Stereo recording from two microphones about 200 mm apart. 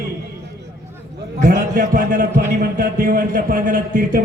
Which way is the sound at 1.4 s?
40° right (ahead or behind).